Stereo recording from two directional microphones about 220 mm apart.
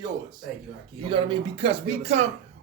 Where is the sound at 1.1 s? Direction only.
25° right (ahead or behind).